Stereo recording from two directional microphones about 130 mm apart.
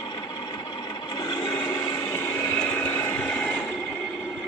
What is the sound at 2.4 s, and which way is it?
Vehicle, 15° left (ahead or behind).